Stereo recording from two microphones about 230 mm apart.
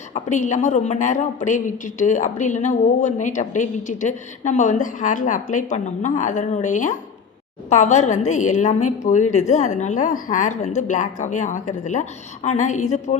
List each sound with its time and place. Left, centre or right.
0.1 s a woman's voice: left